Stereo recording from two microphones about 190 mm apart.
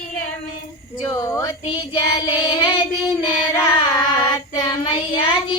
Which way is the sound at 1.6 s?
25° left (ahead or behind).